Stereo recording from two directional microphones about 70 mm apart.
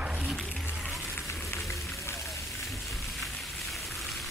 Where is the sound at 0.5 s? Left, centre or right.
Left.